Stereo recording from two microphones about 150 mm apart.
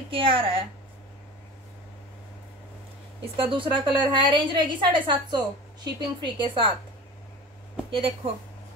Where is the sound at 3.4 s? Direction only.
35° right (ahead or behind).